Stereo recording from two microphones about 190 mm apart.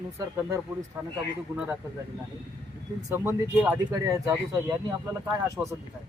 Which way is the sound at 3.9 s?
20° right (ahead or behind).